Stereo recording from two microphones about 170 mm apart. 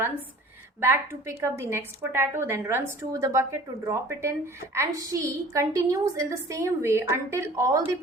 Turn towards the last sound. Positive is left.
turn(degrees=-20)  # may be behind; listen again after turning